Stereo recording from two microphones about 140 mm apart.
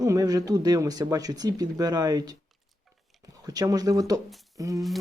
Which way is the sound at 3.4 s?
25° right (ahead or behind).